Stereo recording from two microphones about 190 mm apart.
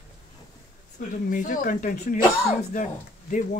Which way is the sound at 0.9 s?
45° left (ahead or behind).